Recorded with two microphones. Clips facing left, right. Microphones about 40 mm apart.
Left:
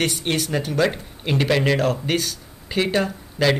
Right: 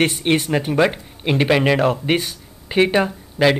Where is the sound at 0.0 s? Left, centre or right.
Right.